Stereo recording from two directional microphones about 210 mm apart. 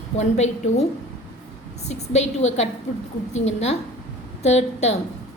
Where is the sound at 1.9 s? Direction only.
30° left (ahead or behind).